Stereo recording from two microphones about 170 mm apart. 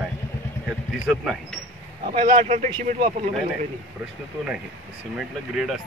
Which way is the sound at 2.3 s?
45° right (ahead or behind).